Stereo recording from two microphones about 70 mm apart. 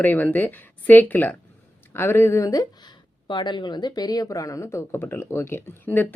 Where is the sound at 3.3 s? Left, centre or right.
Left.